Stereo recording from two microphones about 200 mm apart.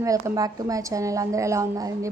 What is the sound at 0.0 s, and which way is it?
A woman's voice, 15° right (ahead or behind).